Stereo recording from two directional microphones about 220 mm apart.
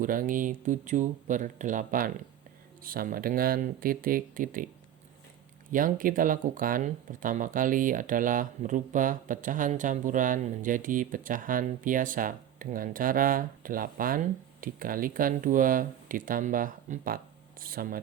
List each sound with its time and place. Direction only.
0.0 s speech: 40° right (ahead or behind)
5.7 s speech: 40° right (ahead or behind)